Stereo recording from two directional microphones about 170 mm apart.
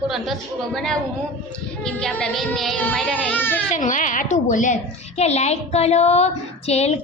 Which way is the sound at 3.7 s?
50° left (ahead or behind).